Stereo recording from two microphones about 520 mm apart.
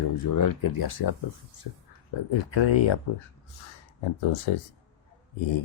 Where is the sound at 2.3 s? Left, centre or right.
Left.